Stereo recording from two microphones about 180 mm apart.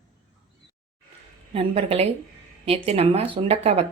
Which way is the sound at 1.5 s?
35° right (ahead or behind).